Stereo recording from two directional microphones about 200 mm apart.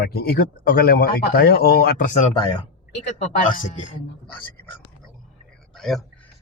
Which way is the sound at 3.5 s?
45° left (ahead or behind).